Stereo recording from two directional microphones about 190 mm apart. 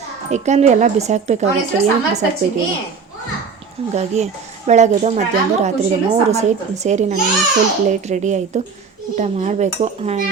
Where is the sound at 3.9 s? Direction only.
35° right (ahead or behind).